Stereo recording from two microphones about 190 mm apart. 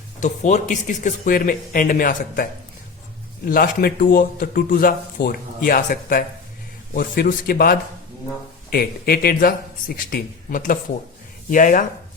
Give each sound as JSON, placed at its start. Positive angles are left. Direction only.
{"t": 0.2, "sound": "speech", "side_deg": 40}